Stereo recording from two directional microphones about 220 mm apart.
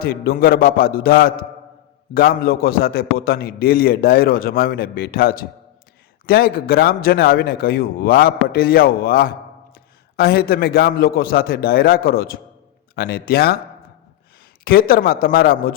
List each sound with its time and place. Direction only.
0.0 s a man's voice: 40° left (ahead or behind)
14.6 s a man's voice: 40° left (ahead or behind)